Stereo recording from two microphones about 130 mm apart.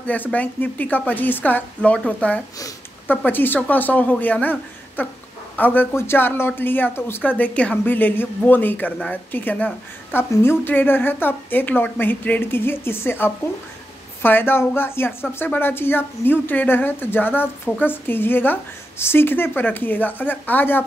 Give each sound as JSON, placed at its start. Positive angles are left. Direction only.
{"t": 0.0, "sound": "speech", "side_deg": 10}